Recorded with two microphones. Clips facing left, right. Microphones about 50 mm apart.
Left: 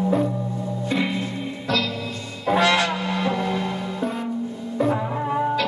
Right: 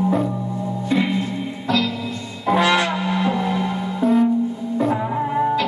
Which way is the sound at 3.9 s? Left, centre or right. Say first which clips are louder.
Right 14 dB; centre.